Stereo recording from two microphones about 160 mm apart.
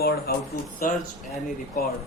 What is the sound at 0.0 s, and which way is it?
Speech, 70° left (ahead or behind).